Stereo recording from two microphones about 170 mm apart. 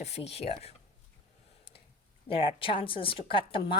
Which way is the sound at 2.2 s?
30° left (ahead or behind).